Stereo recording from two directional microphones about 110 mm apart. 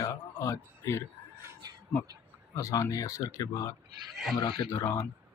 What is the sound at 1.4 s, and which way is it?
Cat, 30° right (ahead or behind).